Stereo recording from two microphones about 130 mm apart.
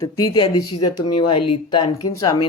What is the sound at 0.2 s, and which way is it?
Speech, 35° left (ahead or behind).